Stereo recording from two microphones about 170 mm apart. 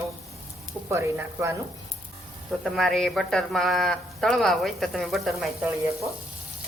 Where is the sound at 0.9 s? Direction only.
15° right (ahead or behind).